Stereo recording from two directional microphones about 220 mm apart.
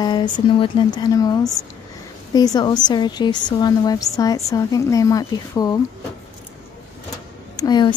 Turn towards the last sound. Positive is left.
turn(degrees=20)  # may be behind; listen again after turning